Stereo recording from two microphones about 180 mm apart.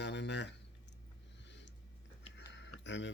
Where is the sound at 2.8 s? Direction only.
90° left.